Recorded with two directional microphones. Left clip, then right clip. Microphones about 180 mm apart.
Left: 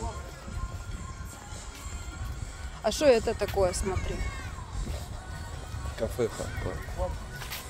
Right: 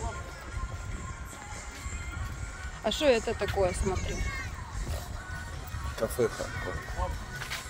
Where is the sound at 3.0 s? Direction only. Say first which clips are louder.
Left 3 dB; 30° left (ahead or behind).